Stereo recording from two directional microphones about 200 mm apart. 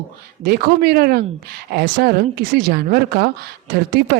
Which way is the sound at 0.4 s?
50° right (ahead or behind).